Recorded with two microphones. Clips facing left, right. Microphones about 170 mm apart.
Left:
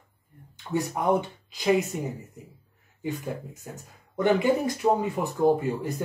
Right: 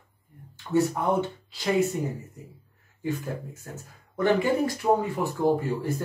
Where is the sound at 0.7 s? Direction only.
15° left (ahead or behind).